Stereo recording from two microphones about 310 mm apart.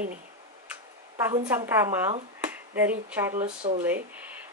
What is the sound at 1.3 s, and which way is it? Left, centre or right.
Speech, centre.